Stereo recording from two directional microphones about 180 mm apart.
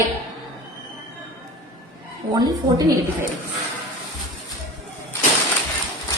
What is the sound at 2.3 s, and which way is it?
Speech, 20° right (ahead or behind).